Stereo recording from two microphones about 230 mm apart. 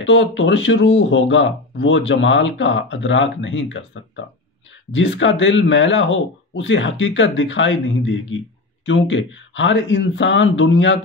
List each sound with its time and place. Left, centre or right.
0.0 s speech: left
4.9 s speech: left